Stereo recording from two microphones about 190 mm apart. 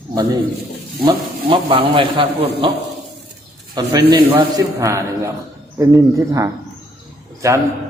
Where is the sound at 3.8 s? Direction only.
20° right (ahead or behind).